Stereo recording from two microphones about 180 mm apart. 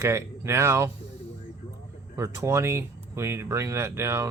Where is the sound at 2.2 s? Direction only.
15° right (ahead or behind).